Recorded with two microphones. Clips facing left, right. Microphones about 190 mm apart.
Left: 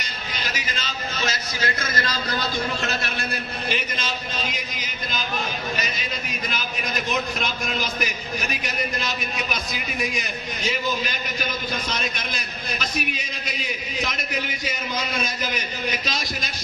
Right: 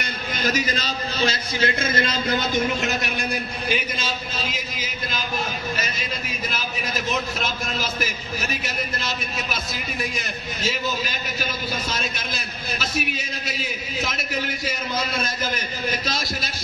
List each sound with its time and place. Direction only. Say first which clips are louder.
0.0 s a man's voice: right 7 dB; 45° right (ahead or behind); by 5.2 s 5° right (ahead or behind)
6.5 s a man's voice: left 1 dB; 5° right (ahead or behind)